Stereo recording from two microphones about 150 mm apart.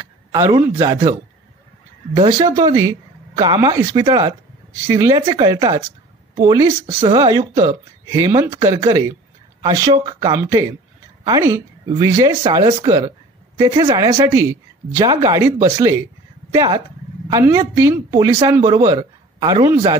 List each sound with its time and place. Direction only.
0.0 s speech: 20° right (ahead or behind)
2.1 s speech: 25° right (ahead or behind)
10.3 s speech: 20° right (ahead or behind)